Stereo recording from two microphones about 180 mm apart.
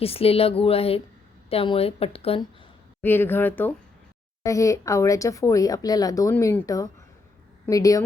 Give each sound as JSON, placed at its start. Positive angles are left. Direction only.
{"t": 0.0, "sound": "a woman's voice", "side_deg": 35}
{"t": 3.0, "sound": "a woman's voice", "side_deg": 10}